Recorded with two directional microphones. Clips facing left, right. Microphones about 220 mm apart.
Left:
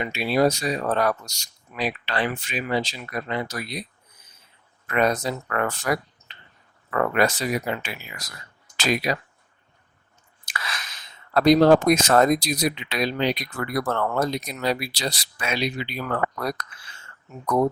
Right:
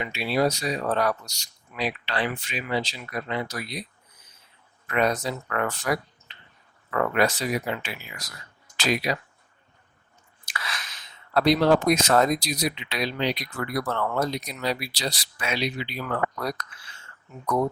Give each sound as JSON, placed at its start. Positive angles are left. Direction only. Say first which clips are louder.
{"t": 0.0, "sound": "speech", "louder": "left 3 dB", "side_deg": 45}
{"t": 4.9, "sound": "speech", "louder": "left 2 dB", "side_deg": 45}
{"t": 10.4, "sound": "chewing", "louder": "left 1 dB", "side_deg": 45}
{"t": 11.3, "sound": "speech", "louder": "left 4 dB", "side_deg": 45}